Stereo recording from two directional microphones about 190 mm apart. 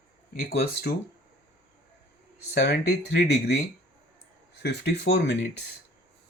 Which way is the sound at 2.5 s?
60° left (ahead or behind).